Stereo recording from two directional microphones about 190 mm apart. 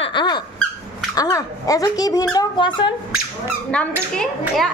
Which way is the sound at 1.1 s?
20° left (ahead or behind).